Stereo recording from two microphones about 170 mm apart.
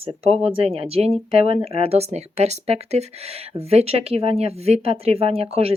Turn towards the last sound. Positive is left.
turn(degrees=-35)  # may be behind; listen again after turning